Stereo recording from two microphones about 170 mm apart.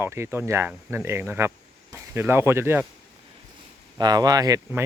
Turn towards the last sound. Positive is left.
turn(degrees=-20)  # may be behind; listen again after turning